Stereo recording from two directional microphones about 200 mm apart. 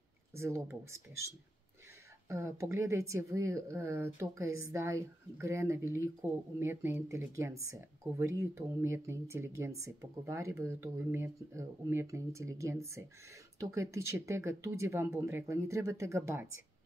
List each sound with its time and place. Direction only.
0.4 s speech: 15° right (ahead or behind)
2.2 s speech: 15° right (ahead or behind)